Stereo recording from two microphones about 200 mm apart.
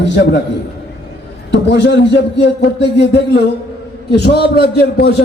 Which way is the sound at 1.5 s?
60° left (ahead or behind).